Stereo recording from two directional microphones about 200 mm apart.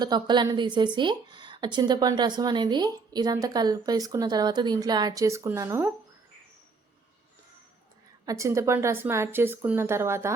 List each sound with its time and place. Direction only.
0.0 s a woman's voice: 20° right (ahead or behind)
8.2 s a woman's voice: 15° right (ahead or behind)